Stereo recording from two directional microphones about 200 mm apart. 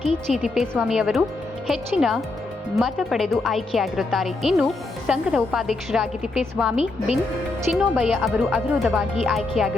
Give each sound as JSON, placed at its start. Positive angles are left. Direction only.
{"t": 0.3, "sound": "speech", "side_deg": 0}